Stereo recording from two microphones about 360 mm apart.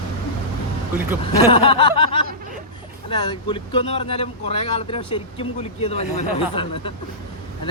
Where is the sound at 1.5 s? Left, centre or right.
Centre.